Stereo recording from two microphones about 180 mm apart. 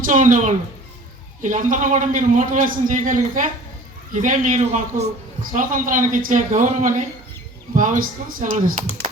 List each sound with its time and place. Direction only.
0.0 s a man's voice: 45° right (ahead or behind)